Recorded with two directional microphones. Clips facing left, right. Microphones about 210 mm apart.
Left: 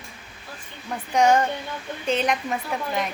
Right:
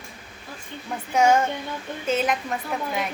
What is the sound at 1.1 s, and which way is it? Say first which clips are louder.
A woman's voice: even; 5° right (ahead or behind).